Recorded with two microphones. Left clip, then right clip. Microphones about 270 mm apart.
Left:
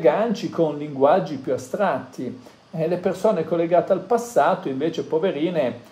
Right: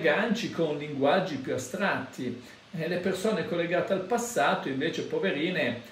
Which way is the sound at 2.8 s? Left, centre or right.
Centre.